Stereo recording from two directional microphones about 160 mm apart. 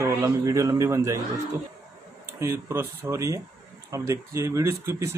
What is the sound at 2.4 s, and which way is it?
Speech, 15° right (ahead or behind).